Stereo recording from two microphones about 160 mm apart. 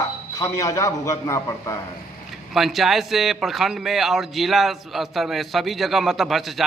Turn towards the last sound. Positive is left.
turn(degrees=0)  # may be behind; listen again after turning